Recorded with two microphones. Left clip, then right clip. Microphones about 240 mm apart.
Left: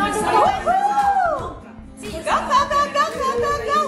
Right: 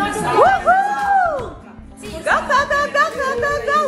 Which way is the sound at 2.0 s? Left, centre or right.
Centre.